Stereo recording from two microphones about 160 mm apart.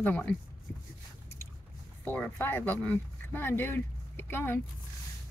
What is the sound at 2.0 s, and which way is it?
Speech, 10° left (ahead or behind).